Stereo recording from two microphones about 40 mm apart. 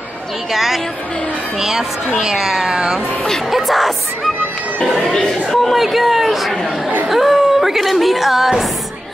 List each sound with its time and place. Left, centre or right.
0.5 s a woman's voice: centre
3.4 s a woman's voice: centre
5.1 s speech: centre
5.6 s a woman's voice: centre